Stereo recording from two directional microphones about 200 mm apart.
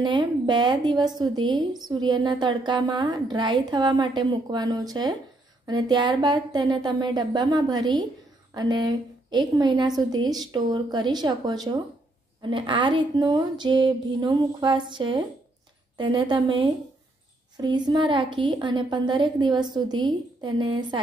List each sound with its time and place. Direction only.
0.0 s a woman's voice: 20° right (ahead or behind)